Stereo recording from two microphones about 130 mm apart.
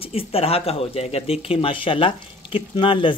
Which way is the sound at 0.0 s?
45° left (ahead or behind).